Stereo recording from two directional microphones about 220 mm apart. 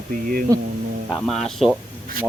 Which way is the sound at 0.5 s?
15° right (ahead or behind).